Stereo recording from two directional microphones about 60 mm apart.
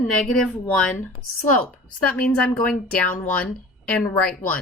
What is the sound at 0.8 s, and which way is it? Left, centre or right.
Speech, left.